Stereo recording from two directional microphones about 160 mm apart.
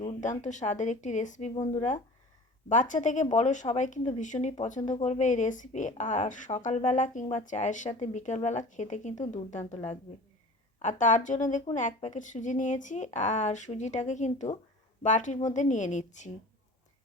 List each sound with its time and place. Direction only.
0.2 s speech: 50° left (ahead or behind)
1.5 s speech: 25° left (ahead or behind)
2.6 s speech: 55° left (ahead or behind)